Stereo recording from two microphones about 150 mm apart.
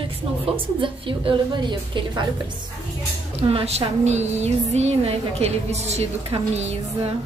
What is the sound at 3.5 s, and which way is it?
Music, 40° right (ahead or behind).